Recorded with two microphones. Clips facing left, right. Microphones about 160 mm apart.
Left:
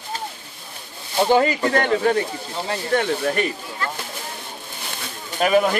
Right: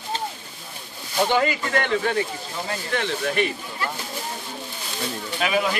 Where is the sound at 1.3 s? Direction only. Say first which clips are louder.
Left 7 dB; 35° left (ahead or behind).